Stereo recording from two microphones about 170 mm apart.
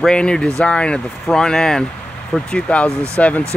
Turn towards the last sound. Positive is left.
turn(degrees=10)  # may be behind; listen again after turning